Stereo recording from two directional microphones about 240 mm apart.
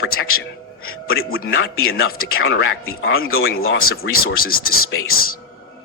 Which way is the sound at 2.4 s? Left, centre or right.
Left.